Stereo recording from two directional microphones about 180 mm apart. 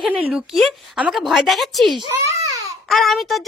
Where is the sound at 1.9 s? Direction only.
25° right (ahead or behind).